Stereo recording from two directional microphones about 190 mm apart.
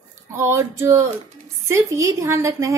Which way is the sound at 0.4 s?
15° right (ahead or behind).